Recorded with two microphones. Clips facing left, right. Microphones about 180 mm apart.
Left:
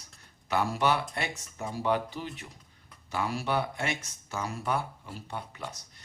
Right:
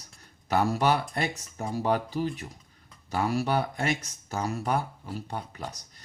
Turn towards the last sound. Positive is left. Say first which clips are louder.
# right 3 dB
turn(degrees=-40)  # may be behind; listen again after turning